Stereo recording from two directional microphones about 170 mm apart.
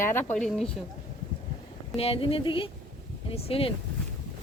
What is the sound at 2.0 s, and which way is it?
Speech, 35° left (ahead or behind).